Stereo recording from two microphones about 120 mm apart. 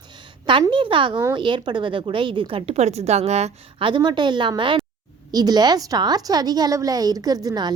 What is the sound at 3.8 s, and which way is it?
A woman's voice, 40° right (ahead or behind).